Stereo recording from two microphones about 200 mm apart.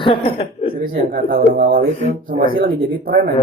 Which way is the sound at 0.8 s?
45° right (ahead or behind).